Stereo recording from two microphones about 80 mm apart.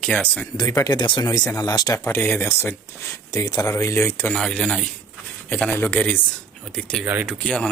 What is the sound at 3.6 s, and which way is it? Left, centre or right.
Speech, left.